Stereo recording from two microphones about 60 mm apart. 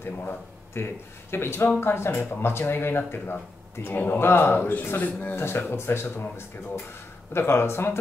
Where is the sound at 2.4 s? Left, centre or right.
Left.